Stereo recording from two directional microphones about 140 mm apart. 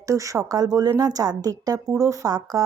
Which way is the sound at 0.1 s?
20° right (ahead or behind).